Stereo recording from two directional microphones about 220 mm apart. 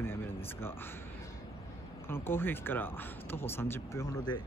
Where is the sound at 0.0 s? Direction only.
10° left (ahead or behind).